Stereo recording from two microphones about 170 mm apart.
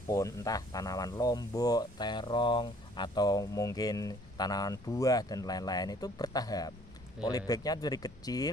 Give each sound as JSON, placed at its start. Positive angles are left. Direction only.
{"t": 0.1, "sound": "speech", "side_deg": 20}